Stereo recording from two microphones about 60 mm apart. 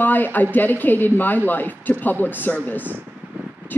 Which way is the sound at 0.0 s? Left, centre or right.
Left.